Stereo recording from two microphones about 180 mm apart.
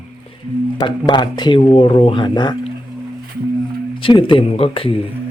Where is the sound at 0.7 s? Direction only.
25° left (ahead or behind).